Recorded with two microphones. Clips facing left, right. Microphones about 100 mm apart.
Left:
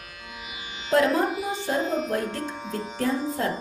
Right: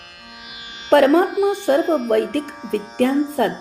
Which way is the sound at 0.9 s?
70° right (ahead or behind).